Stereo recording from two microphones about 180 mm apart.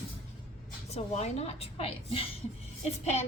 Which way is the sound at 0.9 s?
35° left (ahead or behind).